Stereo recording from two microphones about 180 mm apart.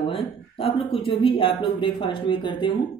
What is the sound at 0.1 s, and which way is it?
Speech, 30° left (ahead or behind).